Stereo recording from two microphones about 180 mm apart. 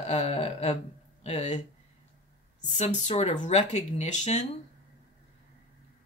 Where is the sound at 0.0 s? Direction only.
35° left (ahead or behind).